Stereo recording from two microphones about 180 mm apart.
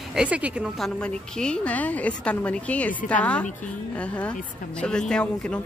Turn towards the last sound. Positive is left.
turn(degrees=5)  # may be behind; listen again after turning